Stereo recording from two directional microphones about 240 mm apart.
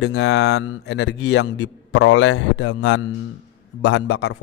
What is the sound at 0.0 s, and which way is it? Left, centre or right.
Speech, left.